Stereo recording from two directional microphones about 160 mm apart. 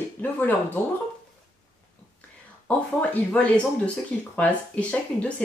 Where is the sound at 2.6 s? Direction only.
10° left (ahead or behind).